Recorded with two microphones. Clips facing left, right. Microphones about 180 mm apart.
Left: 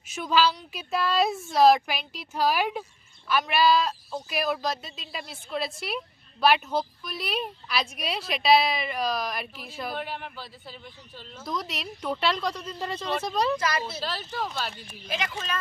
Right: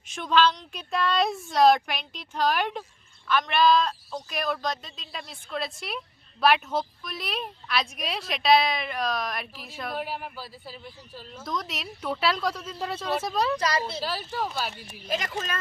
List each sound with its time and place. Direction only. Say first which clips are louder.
0.1 s a woman's voice: right 1 dB; 5° left (ahead or behind)
15.0 s speech: right 2 dB; 40° right (ahead or behind)